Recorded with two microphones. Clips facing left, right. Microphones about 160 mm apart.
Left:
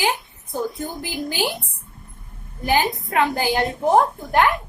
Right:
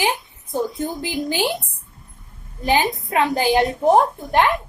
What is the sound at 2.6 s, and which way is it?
A woman's voice, 20° right (ahead or behind).